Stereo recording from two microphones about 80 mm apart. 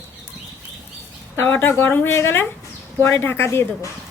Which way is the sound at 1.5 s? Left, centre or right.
Left.